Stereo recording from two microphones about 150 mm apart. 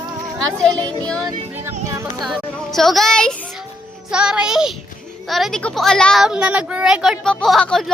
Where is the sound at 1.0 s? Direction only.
5° left (ahead or behind).